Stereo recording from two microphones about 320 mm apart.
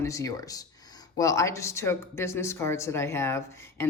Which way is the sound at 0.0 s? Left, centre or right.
Centre.